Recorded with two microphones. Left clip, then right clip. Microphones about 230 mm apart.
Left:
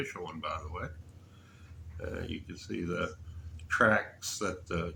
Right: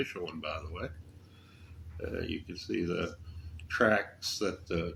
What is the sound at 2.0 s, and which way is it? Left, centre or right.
Speech, left.